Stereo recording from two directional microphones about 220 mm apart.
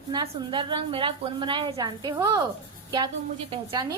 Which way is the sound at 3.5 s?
20° right (ahead or behind).